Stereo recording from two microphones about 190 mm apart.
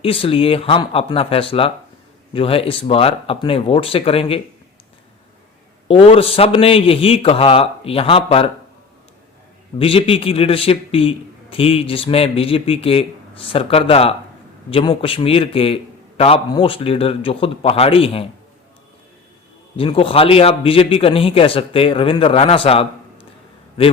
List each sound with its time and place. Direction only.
0.0 s a man's voice: 30° left (ahead or behind)
5.9 s a man's voice: 30° left (ahead or behind)
9.7 s a man's voice: 30° left (ahead or behind)
19.7 s a man's voice: 30° left (ahead or behind)